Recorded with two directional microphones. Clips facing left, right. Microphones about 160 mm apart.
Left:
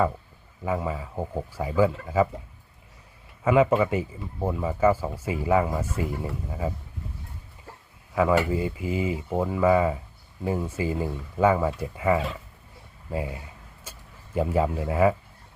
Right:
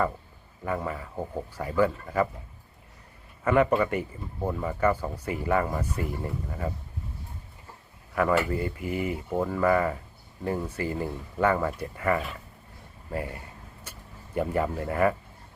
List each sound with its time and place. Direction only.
0.6 s speech: 10° left (ahead or behind)
3.4 s speech: 10° left (ahead or behind)
8.1 s speech: 10° left (ahead or behind)
8.9 s speech: 90° left
9.1 s speech: 15° left (ahead or behind)